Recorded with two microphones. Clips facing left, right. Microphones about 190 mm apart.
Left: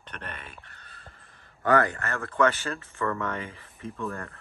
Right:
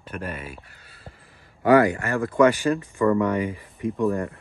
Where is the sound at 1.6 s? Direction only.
10° right (ahead or behind).